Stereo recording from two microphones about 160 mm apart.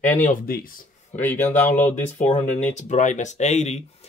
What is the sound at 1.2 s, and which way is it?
Speech, 10° left (ahead or behind).